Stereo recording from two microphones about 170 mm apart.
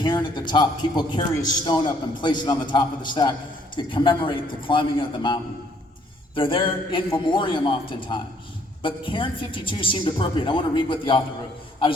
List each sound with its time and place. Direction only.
0.0 s a woman's voice: 25° left (ahead or behind)